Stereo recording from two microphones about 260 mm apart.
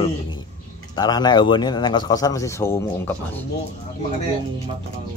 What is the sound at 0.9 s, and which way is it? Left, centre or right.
Speech, centre.